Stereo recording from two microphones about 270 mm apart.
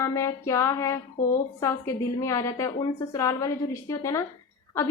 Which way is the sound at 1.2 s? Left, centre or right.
Left.